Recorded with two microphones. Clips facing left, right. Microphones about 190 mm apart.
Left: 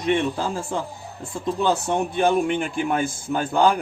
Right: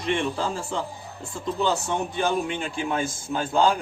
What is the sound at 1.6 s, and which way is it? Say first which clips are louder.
A man's voice: left 3 dB; 55° left (ahead or behind).